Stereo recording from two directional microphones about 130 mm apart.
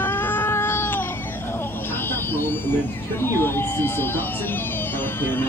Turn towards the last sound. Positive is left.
turn(degrees=15)  # may be behind; listen again after turning